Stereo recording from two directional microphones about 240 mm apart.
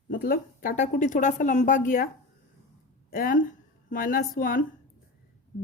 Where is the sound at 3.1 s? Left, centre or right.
Left.